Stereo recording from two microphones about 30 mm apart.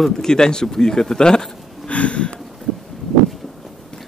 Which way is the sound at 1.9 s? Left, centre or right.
Left.